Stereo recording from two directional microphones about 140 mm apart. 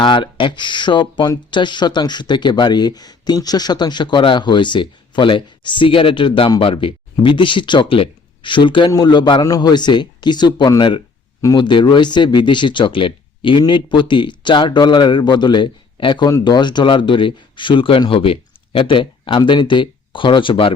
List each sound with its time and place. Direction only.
0.0 s speech: 35° left (ahead or behind)